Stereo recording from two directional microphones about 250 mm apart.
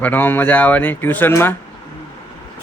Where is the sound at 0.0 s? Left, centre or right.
Centre.